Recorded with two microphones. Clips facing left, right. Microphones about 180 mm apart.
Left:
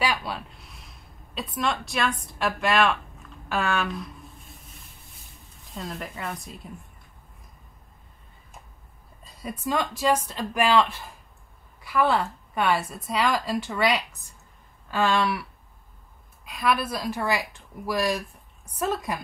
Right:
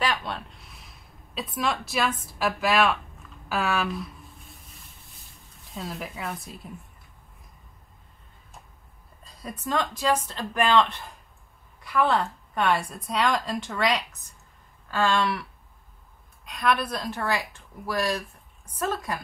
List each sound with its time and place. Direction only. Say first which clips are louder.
0.0 s a sound: left 1 dB; 5° left (ahead or behind)
5.6 s a woman's voice: even; centre (ahead or behind)
9.2 s a woman's voice: left 3 dB; centre (ahead or behind)
16.4 s a woman's voice: even; centre (ahead or behind)